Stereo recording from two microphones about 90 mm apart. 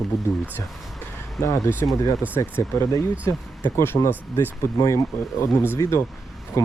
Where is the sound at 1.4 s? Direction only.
40° left (ahead or behind).